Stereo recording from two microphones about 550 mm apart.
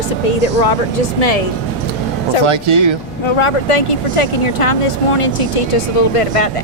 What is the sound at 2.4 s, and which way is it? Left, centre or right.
Speech, right.